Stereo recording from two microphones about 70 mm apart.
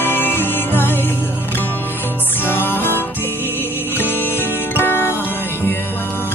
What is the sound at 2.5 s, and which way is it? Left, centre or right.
Music, left.